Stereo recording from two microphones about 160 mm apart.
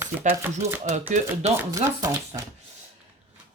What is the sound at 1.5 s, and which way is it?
Speech, 20° right (ahead or behind).